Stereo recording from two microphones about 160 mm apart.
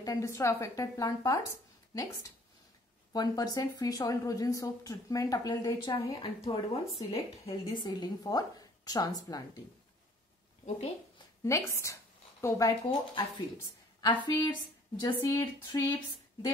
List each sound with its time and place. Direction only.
0.0 s a woman's voice: 20° left (ahead or behind)
3.1 s a woman's voice: 25° left (ahead or behind)
6.5 s a woman's voice: 35° left (ahead or behind)
11.4 s speech: 20° left (ahead or behind)
14.2 s a woman's voice: 25° left (ahead or behind)